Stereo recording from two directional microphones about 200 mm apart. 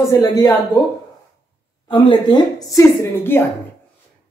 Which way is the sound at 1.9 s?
25° left (ahead or behind).